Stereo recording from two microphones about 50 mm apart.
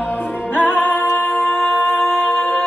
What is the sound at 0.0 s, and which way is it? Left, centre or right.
Music, left.